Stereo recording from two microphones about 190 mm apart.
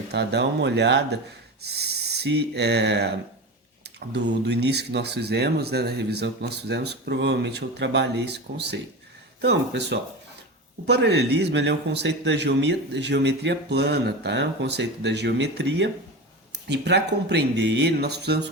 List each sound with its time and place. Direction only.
0.1 s a man's voice: 60° right (ahead or behind)